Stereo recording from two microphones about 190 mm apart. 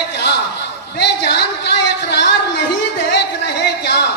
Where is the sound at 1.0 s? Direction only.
60° left (ahead or behind).